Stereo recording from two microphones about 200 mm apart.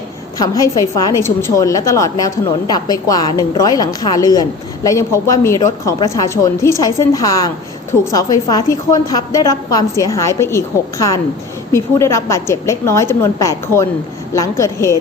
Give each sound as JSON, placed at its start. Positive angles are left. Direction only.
{"t": 0.3, "sound": "a woman's voice", "side_deg": 20}